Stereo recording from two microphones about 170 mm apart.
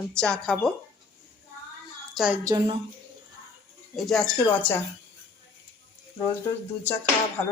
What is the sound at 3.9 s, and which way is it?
Speech, centre (ahead or behind).